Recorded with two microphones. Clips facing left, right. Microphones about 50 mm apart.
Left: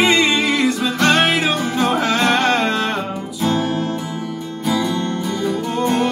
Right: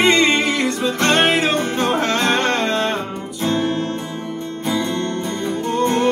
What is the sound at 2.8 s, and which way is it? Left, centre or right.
Music, right.